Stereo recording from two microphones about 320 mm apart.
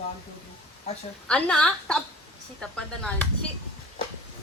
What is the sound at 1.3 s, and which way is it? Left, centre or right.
A woman's voice, centre.